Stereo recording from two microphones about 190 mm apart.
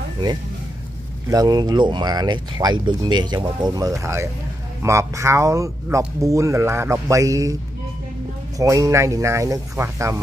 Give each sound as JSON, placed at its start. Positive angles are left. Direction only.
{"t": 1.3, "sound": "speech", "side_deg": -20}
{"t": 8.5, "sound": "speech", "side_deg": -15}